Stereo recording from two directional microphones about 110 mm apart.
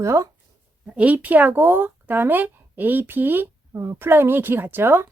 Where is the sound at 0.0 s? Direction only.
25° right (ahead or behind).